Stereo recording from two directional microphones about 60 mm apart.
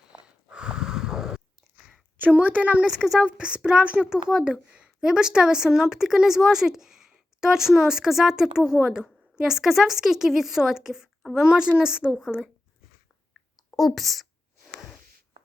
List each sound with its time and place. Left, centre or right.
0.1 s a sound: centre
2.2 s a woman's voice: right
2.8 s speech: centre
13.7 s speech: centre